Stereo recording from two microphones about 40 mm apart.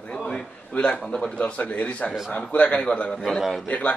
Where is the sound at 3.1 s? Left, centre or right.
Centre.